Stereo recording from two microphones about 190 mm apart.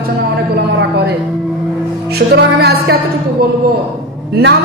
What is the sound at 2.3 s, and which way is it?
Speech, 55° right (ahead or behind).